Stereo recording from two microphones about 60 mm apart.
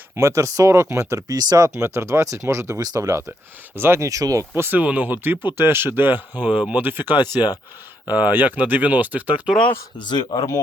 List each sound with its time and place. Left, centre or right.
0.2 s speech: right
1.3 s speech: right
3.8 s speech: right
4.1 s speech: right
4.5 s speech: right
4.8 s speech: right
6.8 s speech: right
10.3 s speech: left